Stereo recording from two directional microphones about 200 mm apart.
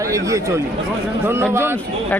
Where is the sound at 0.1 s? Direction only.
15° right (ahead or behind).